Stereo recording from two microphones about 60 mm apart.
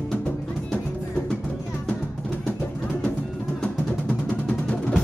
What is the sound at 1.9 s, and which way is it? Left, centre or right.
Music, left.